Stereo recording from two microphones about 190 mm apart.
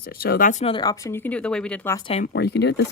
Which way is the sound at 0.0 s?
55° left (ahead or behind).